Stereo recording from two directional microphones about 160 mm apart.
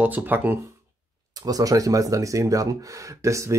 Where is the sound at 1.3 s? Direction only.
25° right (ahead or behind).